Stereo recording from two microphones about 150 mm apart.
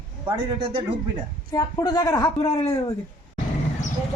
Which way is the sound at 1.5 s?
25° left (ahead or behind).